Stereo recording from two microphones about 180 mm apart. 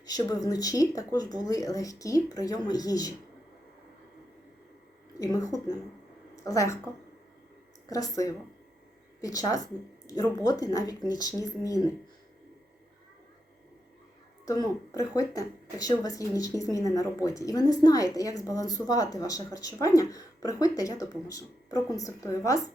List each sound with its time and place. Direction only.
0.0 s a woman's voice: 20° left (ahead or behind)
5.2 s a woman's voice: 20° left (ahead or behind)
7.9 s a woman's voice: 20° left (ahead or behind)
14.9 s a woman's voice: 20° left (ahead or behind)